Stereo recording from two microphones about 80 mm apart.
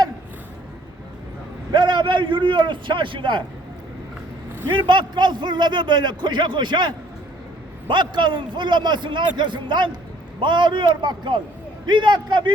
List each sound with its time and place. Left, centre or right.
1.7 s a man's voice: right
4.7 s a man's voice: right